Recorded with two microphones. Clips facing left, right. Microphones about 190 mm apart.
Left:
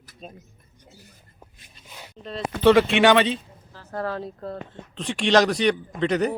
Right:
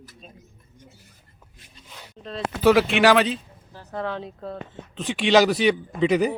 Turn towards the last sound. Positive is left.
turn(degrees=-5)  # may be behind; listen again after turning